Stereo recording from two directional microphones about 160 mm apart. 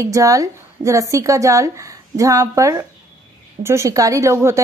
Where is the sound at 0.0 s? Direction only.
20° right (ahead or behind).